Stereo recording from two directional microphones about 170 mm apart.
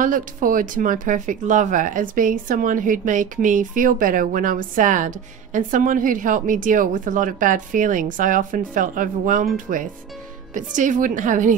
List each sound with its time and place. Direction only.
0.0 s speech: 55° right (ahead or behind)